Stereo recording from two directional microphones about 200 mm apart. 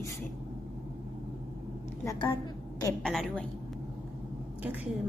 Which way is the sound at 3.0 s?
Centre (ahead or behind).